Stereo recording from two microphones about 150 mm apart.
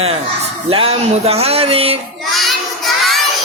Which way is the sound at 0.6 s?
40° right (ahead or behind).